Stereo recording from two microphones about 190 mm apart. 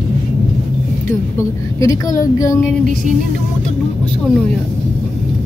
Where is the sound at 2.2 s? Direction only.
15° left (ahead or behind).